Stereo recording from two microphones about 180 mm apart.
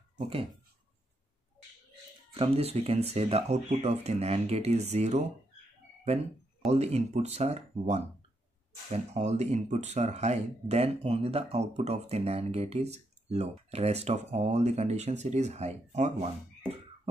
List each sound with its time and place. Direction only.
2.3 s speech: 35° right (ahead or behind)
6.7 s speech: 35° right (ahead or behind)